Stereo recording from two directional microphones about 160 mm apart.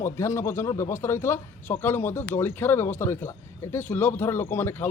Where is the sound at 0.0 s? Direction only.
15° left (ahead or behind).